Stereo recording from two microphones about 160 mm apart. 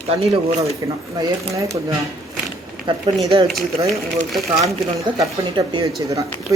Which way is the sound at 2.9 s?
30° right (ahead or behind).